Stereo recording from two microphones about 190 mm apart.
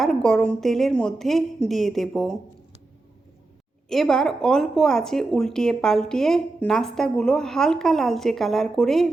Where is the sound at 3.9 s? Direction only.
Centre (ahead or behind).